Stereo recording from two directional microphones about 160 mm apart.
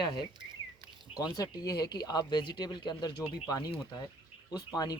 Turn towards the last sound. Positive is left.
turn(degrees=25)  # may be behind; listen again after turning